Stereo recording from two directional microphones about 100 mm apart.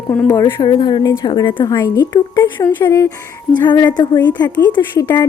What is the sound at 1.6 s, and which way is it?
Speech, 40° left (ahead or behind).